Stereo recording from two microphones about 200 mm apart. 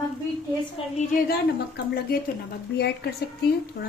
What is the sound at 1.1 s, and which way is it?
Speech, 50° left (ahead or behind).